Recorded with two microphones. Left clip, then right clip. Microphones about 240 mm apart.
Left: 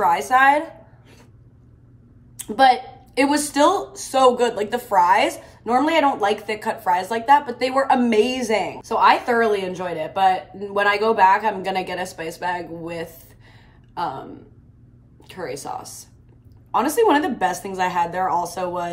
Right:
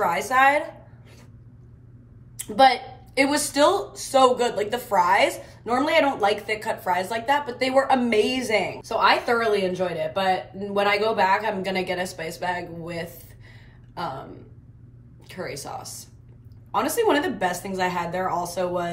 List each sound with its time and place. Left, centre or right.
0.0 s a woman's voice: centre
2.3 s a woman's voice: centre
15.2 s a woman's voice: centre